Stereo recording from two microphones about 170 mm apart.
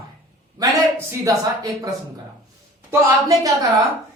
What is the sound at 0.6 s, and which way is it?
A woman's voice, 20° right (ahead or behind).